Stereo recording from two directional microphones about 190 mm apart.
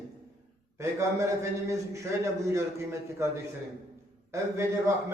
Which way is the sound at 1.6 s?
15° right (ahead or behind).